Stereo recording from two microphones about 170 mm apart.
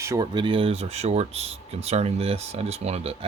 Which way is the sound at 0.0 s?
20° right (ahead or behind).